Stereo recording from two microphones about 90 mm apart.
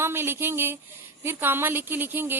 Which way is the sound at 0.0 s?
25° right (ahead or behind).